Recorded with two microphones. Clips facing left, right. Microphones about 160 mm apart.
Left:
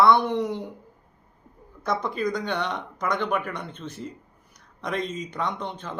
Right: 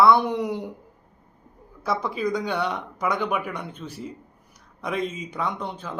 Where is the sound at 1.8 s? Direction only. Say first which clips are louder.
Right 1 dB; 5° right (ahead or behind).